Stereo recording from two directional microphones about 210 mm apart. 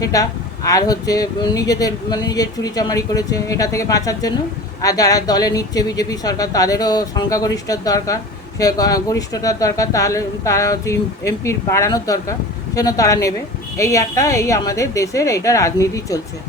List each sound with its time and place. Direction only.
0.0 s speech: 15° left (ahead or behind)